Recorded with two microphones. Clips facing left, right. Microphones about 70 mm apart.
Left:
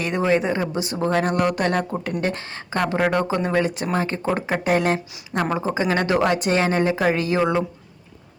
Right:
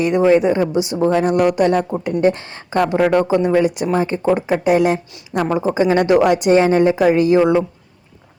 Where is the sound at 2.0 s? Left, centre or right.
Right.